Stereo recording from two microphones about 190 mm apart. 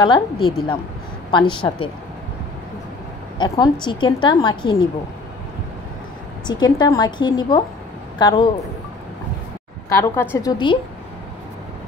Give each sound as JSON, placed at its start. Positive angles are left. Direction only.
{"t": 0.0, "sound": "a woman's voice", "side_deg": 25}
{"t": 3.3, "sound": "a woman's voice", "side_deg": 20}
{"t": 6.4, "sound": "a woman's voice", "side_deg": 20}
{"t": 9.8, "sound": "a woman's voice", "side_deg": 15}